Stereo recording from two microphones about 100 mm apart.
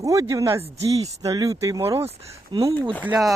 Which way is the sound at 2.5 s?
60° right (ahead or behind).